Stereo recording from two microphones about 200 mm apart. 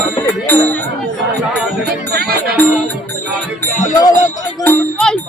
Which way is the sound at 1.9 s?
50° right (ahead or behind).